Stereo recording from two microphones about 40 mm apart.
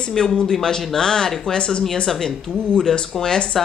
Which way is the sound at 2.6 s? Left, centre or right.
Centre.